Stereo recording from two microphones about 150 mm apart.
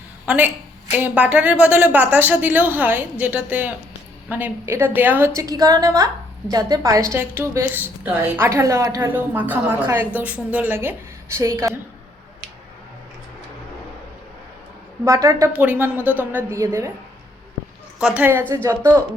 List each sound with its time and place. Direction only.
0.3 s a woman's voice: 10° right (ahead or behind)
15.0 s a woman's voice: 20° right (ahead or behind)
18.0 s a woman's voice: 10° right (ahead or behind)